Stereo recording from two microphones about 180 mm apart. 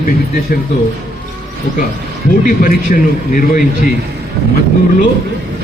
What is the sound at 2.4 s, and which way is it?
A man's voice, 50° left (ahead or behind).